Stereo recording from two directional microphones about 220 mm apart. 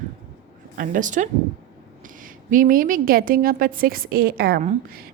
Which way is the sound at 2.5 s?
40° right (ahead or behind).